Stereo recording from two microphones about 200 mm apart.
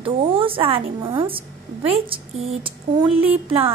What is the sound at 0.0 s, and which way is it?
A woman's voice, 25° right (ahead or behind).